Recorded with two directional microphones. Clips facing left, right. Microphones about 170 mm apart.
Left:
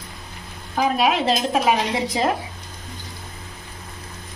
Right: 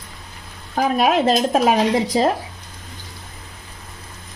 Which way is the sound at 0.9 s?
50° right (ahead or behind).